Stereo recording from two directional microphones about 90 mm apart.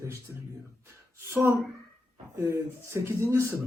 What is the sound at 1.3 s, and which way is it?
A man's voice, 25° right (ahead or behind).